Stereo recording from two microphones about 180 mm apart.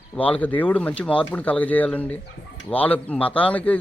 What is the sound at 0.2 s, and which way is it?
A man's voice, 10° left (ahead or behind).